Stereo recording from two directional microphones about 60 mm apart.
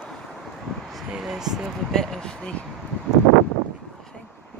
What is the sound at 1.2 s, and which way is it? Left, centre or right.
Speech, centre.